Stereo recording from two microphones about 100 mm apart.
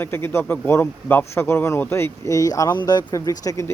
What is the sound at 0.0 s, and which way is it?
Speech, 25° left (ahead or behind).